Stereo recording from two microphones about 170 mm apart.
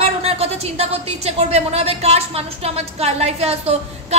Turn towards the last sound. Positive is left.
turn(degrees=-35)  # may be behind; listen again after turning